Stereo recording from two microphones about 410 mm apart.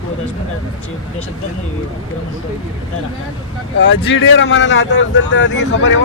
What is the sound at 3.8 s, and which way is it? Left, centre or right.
Speech, left.